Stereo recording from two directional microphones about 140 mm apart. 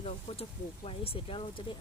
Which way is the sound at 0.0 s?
45° left (ahead or behind).